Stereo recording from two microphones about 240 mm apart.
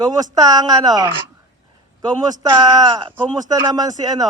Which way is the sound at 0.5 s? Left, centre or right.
Centre.